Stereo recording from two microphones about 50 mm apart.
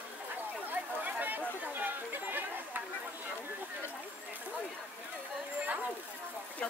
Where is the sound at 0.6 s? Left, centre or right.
Right.